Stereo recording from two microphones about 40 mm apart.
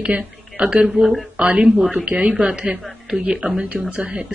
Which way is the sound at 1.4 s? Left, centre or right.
Right.